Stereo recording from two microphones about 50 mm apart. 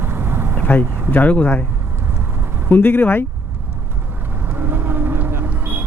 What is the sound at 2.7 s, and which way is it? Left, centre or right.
Speech, left.